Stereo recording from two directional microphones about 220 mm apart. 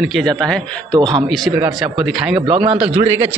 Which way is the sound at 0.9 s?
20° right (ahead or behind).